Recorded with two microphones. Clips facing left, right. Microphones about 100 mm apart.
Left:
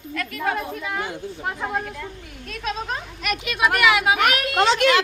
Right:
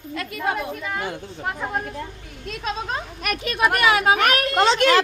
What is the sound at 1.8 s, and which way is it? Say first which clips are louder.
Speech: right 2 dB; 35° right (ahead or behind).